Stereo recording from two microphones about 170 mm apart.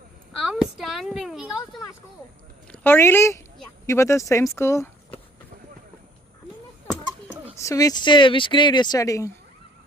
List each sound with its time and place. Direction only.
0.3 s a sound: 5° right (ahead or behind)
2.7 s speech: 10° left (ahead or behind)
7.6 s speech: 20° left (ahead or behind)